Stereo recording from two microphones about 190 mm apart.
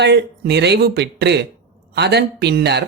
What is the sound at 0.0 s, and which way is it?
Speech, 60° right (ahead or behind).